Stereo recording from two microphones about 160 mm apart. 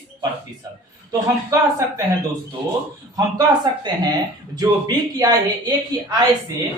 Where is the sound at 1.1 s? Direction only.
20° right (ahead or behind).